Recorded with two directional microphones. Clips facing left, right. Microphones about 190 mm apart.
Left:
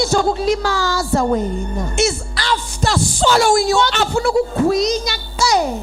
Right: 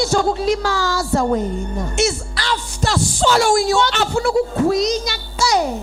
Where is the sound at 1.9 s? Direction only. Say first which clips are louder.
Left 1 dB; 10° left (ahead or behind).